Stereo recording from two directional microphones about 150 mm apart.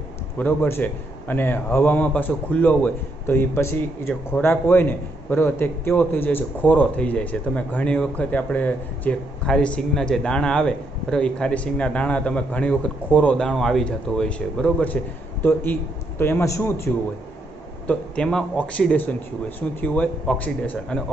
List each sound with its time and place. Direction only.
0.4 s a man's voice: 10° left (ahead or behind)
17.8 s a man's voice: 5° left (ahead or behind)